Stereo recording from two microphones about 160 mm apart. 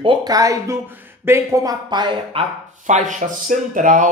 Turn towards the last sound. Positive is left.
turn(degrees=-55)  # may be behind; listen again after turning